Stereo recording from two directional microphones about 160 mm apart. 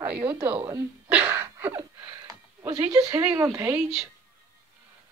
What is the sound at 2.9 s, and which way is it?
Speech, 25° right (ahead or behind).